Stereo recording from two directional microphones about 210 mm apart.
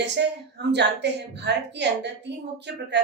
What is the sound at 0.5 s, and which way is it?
A woman's voice, 55° right (ahead or behind).